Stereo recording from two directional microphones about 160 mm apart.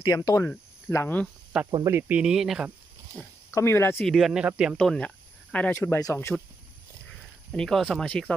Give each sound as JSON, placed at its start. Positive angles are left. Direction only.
{"t": 0.0, "sound": "speech", "side_deg": 25}
{"t": 1.7, "sound": "speech", "side_deg": -20}
{"t": 3.5, "sound": "speech", "side_deg": 15}
{"t": 4.0, "sound": "speech", "side_deg": 0}
{"t": 4.8, "sound": "speech", "side_deg": 5}
{"t": 7.5, "sound": "speech", "side_deg": 5}